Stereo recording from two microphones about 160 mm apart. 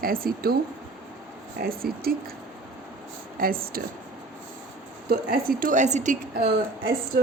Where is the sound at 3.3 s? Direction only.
65° right (ahead or behind).